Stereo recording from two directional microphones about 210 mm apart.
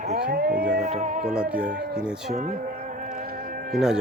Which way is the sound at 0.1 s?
45° right (ahead or behind).